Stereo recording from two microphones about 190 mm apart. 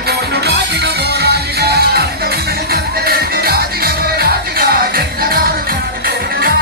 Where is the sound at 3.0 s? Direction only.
55° right (ahead or behind).